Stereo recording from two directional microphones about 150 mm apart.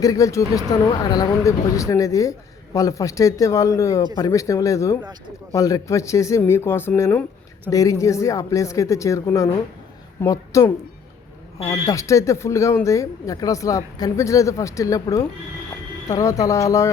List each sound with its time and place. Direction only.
0.0 s speech: 20° left (ahead or behind)